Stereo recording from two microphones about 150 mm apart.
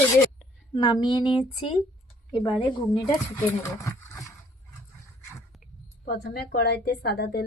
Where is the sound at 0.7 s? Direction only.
25° left (ahead or behind).